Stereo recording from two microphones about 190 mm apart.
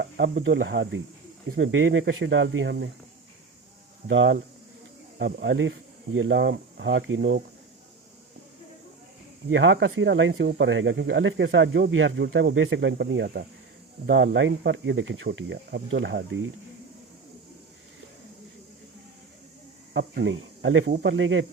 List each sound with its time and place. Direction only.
0.0 s speech: 65° right (ahead or behind)
4.1 s speech: 75° right (ahead or behind)
9.5 s speech: 75° right (ahead or behind)
14.1 s speech: 80° right
19.9 s speech: 65° right (ahead or behind); by 21.4 s 90° right